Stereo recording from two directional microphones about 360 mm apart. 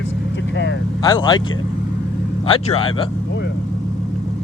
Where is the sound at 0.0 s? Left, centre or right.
Left.